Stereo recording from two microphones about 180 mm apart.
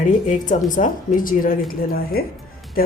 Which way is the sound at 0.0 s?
45° left (ahead or behind).